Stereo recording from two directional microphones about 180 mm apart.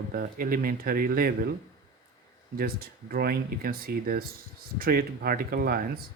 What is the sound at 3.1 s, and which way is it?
Speech, 55° right (ahead or behind).